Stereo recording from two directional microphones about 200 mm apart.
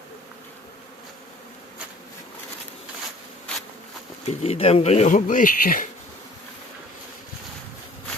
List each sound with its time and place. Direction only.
4.3 s speech: 30° left (ahead or behind)